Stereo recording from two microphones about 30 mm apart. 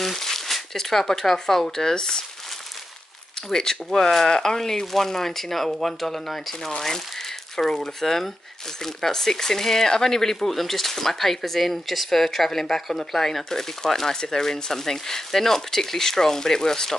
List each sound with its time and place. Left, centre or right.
0.0 s speech: centre
3.5 s speech: centre
7.7 s speech: centre